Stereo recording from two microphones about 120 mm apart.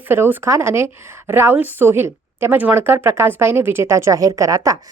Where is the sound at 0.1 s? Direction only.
20° right (ahead or behind).